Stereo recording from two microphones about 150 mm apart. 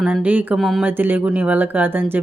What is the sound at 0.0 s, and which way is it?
Speech, 10° right (ahead or behind).